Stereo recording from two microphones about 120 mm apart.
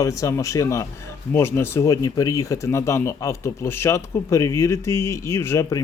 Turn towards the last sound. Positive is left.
turn(degrees=20)  # may be behind; listen again after turning